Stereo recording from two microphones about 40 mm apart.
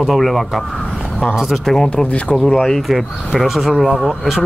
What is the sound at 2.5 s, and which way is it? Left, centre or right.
Speech, centre.